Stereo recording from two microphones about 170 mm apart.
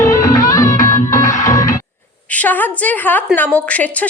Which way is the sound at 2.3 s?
10° left (ahead or behind).